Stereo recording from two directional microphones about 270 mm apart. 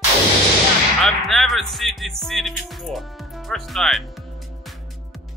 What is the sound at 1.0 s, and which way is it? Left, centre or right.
Speech, centre.